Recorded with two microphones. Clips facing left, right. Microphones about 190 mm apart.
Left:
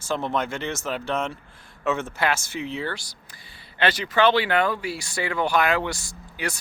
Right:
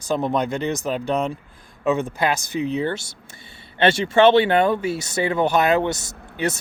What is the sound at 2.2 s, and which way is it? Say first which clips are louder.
Speech: right 2 dB; 15° right (ahead or behind).